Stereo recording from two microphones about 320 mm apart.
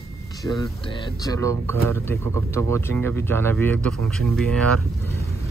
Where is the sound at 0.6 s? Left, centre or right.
Centre.